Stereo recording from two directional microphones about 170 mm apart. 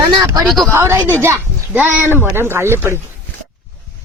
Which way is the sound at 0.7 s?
15° right (ahead or behind).